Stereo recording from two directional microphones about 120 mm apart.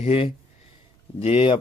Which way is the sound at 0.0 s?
55° left (ahead or behind).